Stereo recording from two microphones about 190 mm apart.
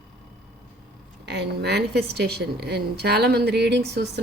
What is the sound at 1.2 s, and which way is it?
A woman's voice, 65° right (ahead or behind).